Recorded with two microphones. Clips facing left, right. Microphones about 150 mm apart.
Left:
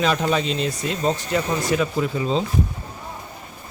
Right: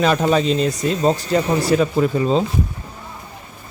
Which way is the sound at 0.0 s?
45° right (ahead or behind).